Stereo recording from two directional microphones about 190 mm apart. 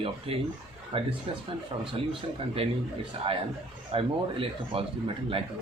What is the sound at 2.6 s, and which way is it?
Speech, 30° right (ahead or behind).